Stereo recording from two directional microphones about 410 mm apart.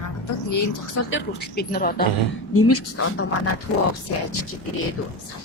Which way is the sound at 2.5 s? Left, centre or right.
Left.